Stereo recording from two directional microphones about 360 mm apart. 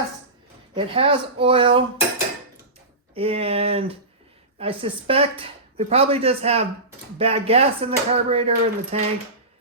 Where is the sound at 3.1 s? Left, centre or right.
Centre.